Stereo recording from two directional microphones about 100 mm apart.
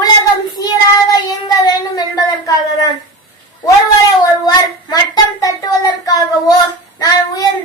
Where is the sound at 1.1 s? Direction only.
40° left (ahead or behind).